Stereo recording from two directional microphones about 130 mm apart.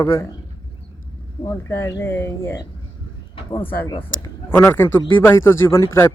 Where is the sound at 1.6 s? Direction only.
20° left (ahead or behind).